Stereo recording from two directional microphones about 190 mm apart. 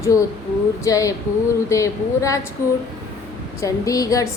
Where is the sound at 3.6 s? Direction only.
15° left (ahead or behind).